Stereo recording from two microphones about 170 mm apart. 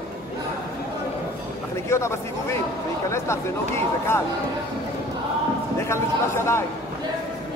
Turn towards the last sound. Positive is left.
turn(degrees=15)  # may be behind; listen again after turning